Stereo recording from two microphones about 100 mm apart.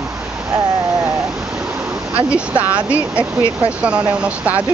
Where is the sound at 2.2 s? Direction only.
10° right (ahead or behind).